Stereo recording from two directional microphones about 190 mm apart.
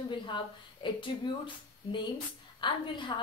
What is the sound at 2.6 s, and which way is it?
Speech, 25° left (ahead or behind).